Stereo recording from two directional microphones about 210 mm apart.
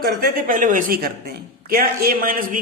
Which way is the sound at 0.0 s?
45° right (ahead or behind).